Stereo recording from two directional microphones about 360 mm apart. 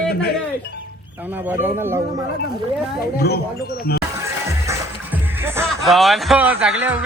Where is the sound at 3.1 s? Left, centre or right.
Left.